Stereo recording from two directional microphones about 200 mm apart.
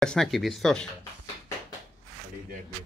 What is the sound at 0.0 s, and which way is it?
Speech, 5° left (ahead or behind).